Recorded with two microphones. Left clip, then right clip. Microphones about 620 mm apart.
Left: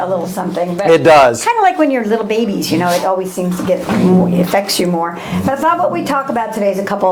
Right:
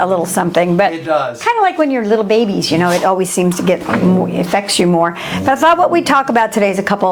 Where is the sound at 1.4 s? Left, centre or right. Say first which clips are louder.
Left 1 dB; right.